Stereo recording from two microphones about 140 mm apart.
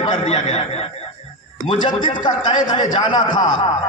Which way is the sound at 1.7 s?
35° left (ahead or behind).